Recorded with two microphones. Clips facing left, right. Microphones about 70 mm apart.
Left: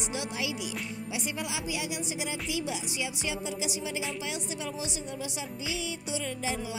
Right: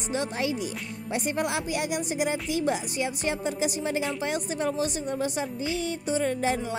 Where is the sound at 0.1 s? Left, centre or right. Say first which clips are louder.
Right 8 dB; right.